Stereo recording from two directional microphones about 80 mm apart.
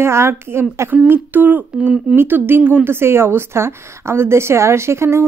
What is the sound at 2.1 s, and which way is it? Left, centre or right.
A woman's voice, right.